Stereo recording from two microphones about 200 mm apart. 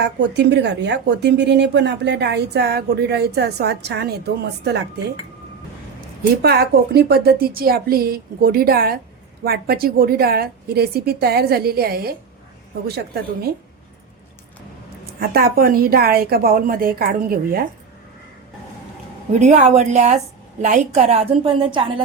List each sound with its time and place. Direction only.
0.0 s a woman's voice: 60° right (ahead or behind)
6.3 s a woman's voice: 55° right (ahead or behind)
15.2 s a woman's voice: 50° right (ahead or behind)
19.3 s a woman's voice: 35° right (ahead or behind)